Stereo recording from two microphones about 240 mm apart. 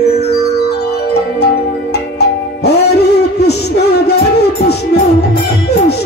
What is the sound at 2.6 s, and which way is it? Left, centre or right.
Music, left.